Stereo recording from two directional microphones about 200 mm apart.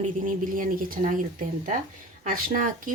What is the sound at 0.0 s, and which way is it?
A woman's voice, 40° right (ahead or behind).